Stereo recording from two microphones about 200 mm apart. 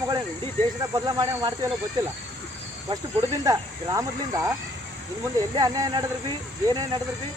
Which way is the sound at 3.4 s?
15° right (ahead or behind).